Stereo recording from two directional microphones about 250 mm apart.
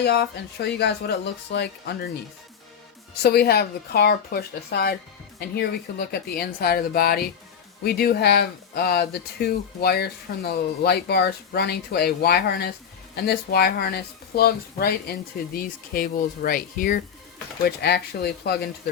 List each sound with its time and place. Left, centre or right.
0.0 s speech: left
3.2 s speech: left